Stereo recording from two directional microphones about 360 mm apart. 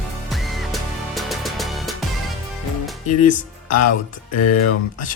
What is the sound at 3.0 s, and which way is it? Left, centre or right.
Speech, left.